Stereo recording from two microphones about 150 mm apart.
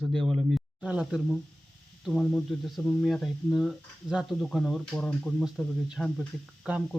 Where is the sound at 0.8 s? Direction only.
5° right (ahead or behind).